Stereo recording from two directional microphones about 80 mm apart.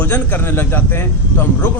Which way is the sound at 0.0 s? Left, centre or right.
Left.